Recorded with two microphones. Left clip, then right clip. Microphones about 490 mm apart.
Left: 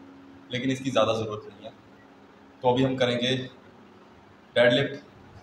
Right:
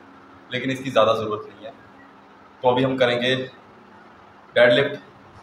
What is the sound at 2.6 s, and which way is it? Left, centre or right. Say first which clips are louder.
Speech: right 5 dB; left.